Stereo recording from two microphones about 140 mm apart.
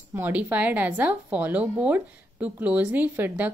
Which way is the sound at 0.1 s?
10° right (ahead or behind).